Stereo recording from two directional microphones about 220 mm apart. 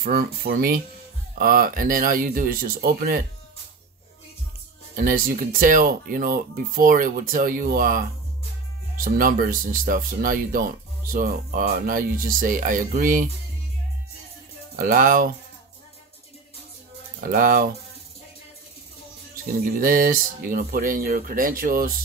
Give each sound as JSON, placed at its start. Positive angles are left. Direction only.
{"t": 0.0, "sound": "speech", "side_deg": -45}
{"t": 4.9, "sound": "speech", "side_deg": -40}
{"t": 14.8, "sound": "speech", "side_deg": -40}
{"t": 17.2, "sound": "speech", "side_deg": -40}
{"t": 19.8, "sound": "speech", "side_deg": -40}